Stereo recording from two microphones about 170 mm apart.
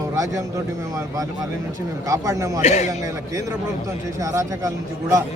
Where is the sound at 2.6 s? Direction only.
40° left (ahead or behind).